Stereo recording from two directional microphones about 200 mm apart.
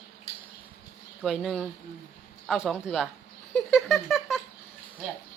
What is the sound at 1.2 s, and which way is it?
Speech, centre (ahead or behind).